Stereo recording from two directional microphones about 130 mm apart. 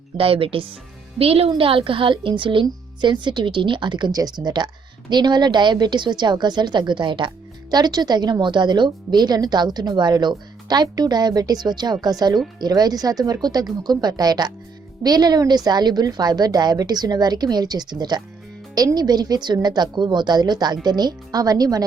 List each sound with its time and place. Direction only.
0.2 s a woman's voice: 45° right (ahead or behind); by 21.8 s 30° right (ahead or behind)